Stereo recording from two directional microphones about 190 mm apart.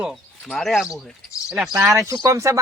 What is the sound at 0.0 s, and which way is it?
Speech, centre (ahead or behind).